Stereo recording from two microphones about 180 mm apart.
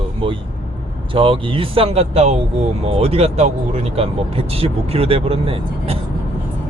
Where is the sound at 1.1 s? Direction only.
30° right (ahead or behind).